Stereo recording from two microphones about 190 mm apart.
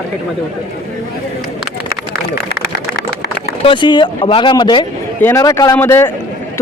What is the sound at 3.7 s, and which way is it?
A man's voice, 25° left (ahead or behind).